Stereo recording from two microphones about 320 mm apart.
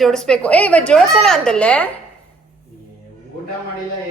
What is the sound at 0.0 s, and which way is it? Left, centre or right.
A woman's voice, centre.